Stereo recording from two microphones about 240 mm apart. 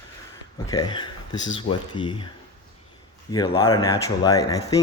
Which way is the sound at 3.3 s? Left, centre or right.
Centre.